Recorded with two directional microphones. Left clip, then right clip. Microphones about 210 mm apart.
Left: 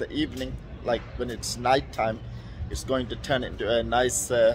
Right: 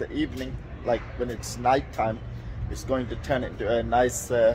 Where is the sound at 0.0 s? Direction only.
10° left (ahead or behind).